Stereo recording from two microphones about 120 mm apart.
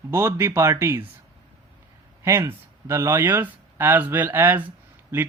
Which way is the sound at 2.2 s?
25° right (ahead or behind).